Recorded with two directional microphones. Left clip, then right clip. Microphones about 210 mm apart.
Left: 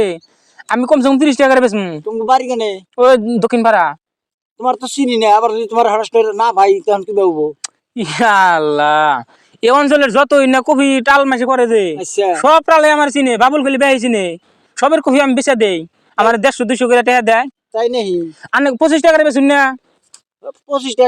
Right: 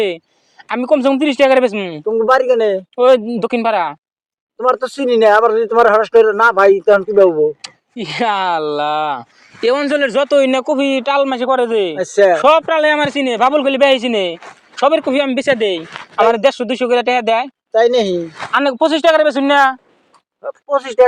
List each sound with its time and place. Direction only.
0.0 s speech: 60° left (ahead or behind)
2.0 s speech: 40° left (ahead or behind)
3.0 s speech: 60° left (ahead or behind)
4.6 s speech: 40° left (ahead or behind)
7.6 s speech: 60° left (ahead or behind)
17.7 s speech: 45° left (ahead or behind)